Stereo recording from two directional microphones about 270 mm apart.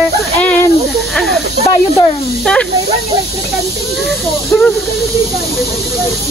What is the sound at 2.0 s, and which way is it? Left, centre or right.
Speech, centre.